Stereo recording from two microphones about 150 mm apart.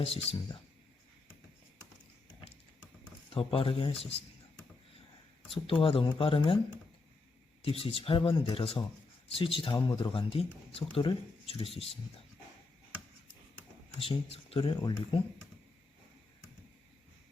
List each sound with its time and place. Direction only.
0.0 s speech: 40° left (ahead or behind)
3.2 s speech: 35° left (ahead or behind)
5.5 s speech: 40° left (ahead or behind)
7.6 s speech: 40° left (ahead or behind)
14.0 s speech: 40° left (ahead or behind)